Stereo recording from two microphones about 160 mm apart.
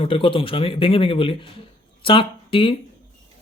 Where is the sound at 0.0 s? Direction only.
35° left (ahead or behind).